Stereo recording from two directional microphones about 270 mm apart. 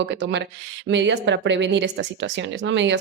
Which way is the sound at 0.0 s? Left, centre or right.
Right.